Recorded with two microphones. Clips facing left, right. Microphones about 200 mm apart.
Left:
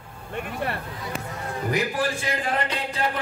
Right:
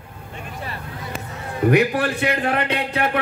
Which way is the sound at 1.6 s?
65° right (ahead or behind).